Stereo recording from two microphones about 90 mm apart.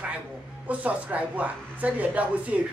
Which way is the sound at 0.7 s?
15° right (ahead or behind).